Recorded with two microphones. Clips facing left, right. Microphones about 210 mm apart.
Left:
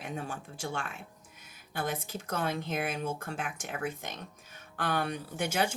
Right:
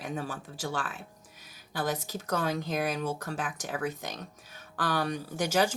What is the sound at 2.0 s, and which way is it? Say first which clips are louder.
Speech: right 3 dB; 35° right (ahead or behind).